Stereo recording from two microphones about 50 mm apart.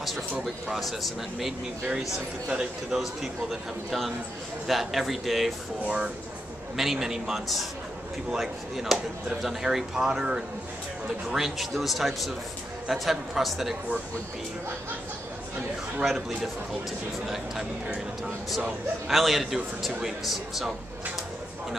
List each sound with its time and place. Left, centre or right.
0.7 s a man's voice: centre
1.9 s speech: centre
3.0 s a man's voice: centre
6.8 s a man's voice: centre
16.0 s a man's voice: centre
19.0 s a man's voice: centre